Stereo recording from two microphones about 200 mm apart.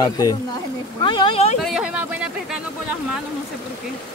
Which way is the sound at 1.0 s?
25° left (ahead or behind).